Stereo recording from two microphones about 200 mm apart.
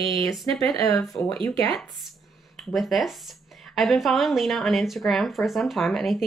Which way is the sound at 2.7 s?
Centre (ahead or behind).